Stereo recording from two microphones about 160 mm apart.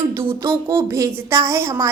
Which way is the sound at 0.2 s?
15° right (ahead or behind).